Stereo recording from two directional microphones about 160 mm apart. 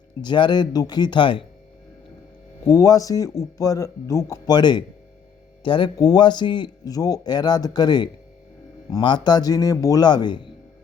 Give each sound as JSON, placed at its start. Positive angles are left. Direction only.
{"t": 0.2, "sound": "a man's voice", "side_deg": 30}
{"t": 2.6, "sound": "a man's voice", "side_deg": 20}